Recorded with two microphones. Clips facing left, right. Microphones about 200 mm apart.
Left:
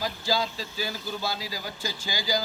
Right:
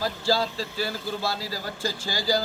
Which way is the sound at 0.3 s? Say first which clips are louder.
Right 4 dB; 35° right (ahead or behind).